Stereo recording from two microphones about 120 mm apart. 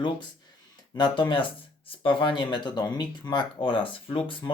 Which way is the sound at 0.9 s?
40° left (ahead or behind).